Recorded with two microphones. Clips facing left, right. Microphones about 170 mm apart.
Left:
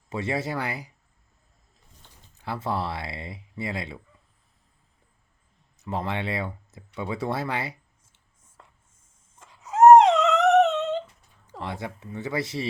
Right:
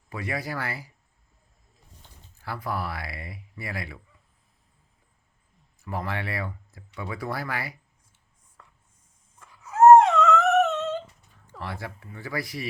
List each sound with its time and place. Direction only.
0.1 s speech: 25° left (ahead or behind)
2.4 s speech: 25° left (ahead or behind)
5.7 s speech: 20° left (ahead or behind)
9.4 s dog: 20° left (ahead or behind)
11.5 s speech: 20° left (ahead or behind)